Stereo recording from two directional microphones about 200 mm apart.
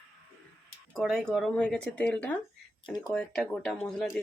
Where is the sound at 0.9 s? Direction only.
Centre (ahead or behind).